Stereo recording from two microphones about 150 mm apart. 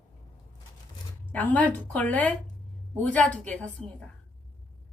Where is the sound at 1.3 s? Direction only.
10° left (ahead or behind).